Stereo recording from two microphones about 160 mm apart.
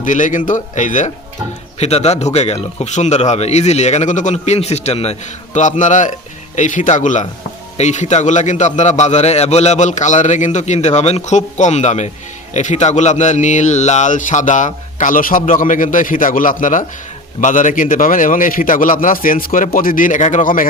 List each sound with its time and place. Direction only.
0.0 s a man's voice: 55° left (ahead or behind)